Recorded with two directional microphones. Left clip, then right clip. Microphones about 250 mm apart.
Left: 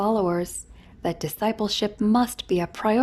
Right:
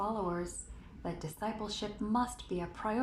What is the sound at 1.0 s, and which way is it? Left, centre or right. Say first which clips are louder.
A woman's voice: left 13 dB; left.